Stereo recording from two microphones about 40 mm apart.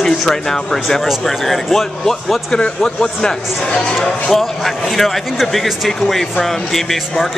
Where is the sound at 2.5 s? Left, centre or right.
Centre.